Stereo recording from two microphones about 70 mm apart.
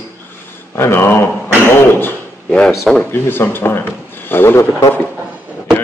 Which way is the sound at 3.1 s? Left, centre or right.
Left.